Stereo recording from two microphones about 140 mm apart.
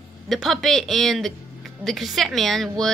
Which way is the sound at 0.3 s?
Centre (ahead or behind).